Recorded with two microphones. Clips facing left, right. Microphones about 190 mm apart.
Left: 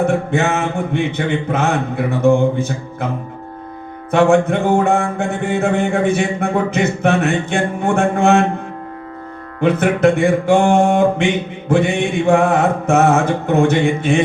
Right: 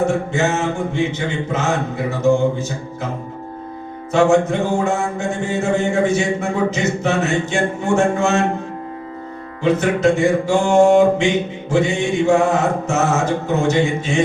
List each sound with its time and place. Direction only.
0.0 s mantra: 60° left (ahead or behind)
4.1 s mantra: 60° left (ahead or behind)
9.6 s mantra: 60° left (ahead or behind)